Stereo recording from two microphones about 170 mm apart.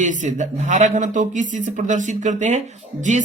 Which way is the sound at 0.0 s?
45° right (ahead or behind).